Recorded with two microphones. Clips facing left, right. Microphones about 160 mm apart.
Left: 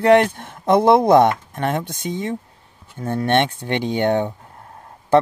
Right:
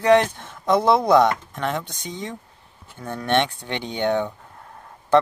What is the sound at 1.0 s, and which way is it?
Speech, 25° left (ahead or behind).